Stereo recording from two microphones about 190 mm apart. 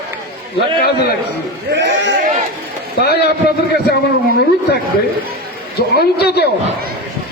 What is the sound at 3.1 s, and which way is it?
Speech, 60° left (ahead or behind).